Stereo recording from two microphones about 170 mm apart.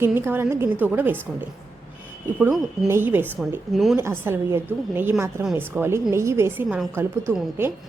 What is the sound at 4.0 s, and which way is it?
A woman's voice, 15° right (ahead or behind).